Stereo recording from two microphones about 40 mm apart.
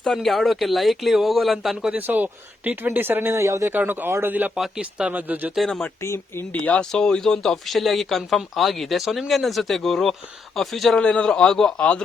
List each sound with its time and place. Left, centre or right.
0.0 s speech: centre
0.3 s speech: centre
2.0 s speech: right
3.8 s a man's voice: right
4.3 s a man's voice: right
4.8 s speech: right
5.1 s a man's voice: right
6.5 s speech: left
6.9 s a man's voice: centre
10.9 s a man's voice: left
11.8 s speech: left